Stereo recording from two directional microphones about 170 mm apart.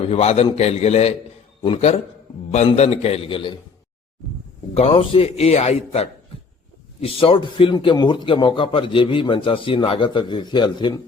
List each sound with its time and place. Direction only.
0.0 s a man's voice: 35° left (ahead or behind)
4.7 s a man's voice: 35° left (ahead or behind)